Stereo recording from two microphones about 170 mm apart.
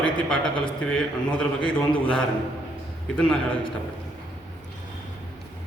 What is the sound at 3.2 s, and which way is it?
Speech, 5° left (ahead or behind).